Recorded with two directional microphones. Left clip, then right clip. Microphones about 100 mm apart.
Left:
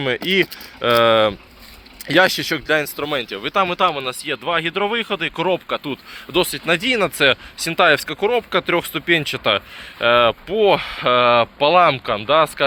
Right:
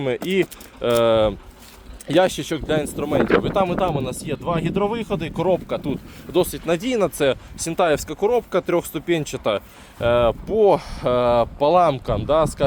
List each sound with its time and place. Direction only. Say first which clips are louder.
0.0 s speech: left 3 dB; 30° right (ahead or behind)
3.0 s speech: right 4 dB; 20° right (ahead or behind)
6.3 s speech: left 2 dB; 25° right (ahead or behind)